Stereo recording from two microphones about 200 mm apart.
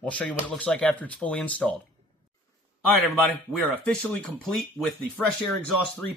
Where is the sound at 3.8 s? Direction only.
5° left (ahead or behind).